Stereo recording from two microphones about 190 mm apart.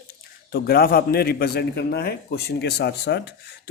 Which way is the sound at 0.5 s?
55° left (ahead or behind).